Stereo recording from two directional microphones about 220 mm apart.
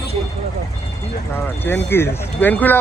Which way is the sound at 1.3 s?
10° left (ahead or behind).